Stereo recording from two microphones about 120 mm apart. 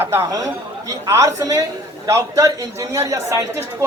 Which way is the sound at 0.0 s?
25° right (ahead or behind).